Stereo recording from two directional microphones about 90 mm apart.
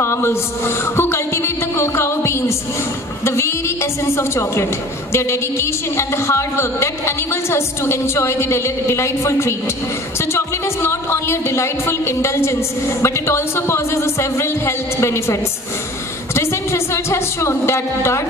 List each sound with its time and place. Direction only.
0.0 s mantra: 30° left (ahead or behind)
3.3 s a woman's voice: 30° left (ahead or behind)
16.3 s a woman's voice: 30° left (ahead or behind)